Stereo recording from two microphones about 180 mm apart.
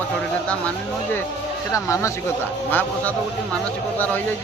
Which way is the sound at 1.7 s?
15° left (ahead or behind).